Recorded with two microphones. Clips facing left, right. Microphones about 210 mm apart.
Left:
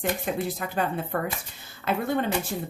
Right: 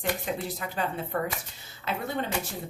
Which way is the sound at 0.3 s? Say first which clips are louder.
Left 4 dB; 55° left (ahead or behind).